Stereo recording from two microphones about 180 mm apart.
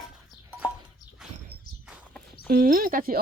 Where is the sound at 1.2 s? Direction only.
5° right (ahead or behind).